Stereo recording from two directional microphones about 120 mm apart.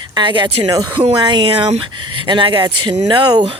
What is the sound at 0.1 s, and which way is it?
Speech, 40° right (ahead or behind).